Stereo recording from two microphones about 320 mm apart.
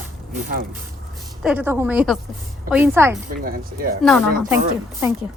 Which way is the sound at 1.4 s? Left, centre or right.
Centre.